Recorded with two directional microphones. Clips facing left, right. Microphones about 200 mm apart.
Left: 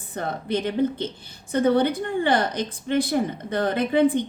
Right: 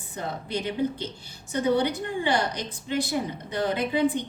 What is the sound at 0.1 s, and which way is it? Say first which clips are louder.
A woman's voice: left 5 dB; 55° left (ahead or behind).